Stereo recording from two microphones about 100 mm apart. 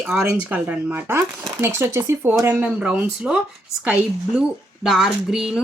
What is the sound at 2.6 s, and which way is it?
Speech, 10° right (ahead or behind).